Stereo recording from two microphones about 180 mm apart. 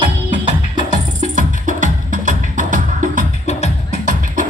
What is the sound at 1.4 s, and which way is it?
Music, 45° right (ahead or behind).